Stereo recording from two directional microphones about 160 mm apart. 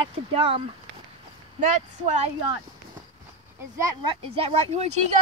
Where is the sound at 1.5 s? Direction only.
45° right (ahead or behind).